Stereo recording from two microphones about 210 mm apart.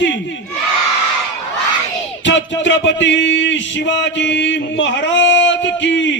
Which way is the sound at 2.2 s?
60° left (ahead or behind).